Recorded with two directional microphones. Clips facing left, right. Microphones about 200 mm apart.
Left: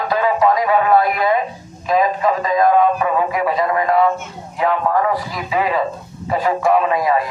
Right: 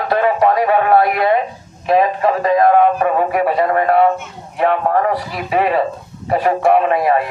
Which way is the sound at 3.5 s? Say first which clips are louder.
Right 3 dB; 65° right (ahead or behind).